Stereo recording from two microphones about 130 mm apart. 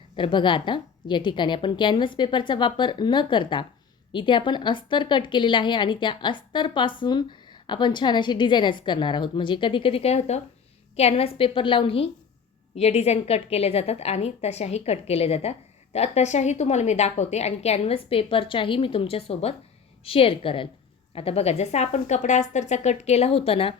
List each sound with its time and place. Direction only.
0.2 s a woman's voice: 40° left (ahead or behind)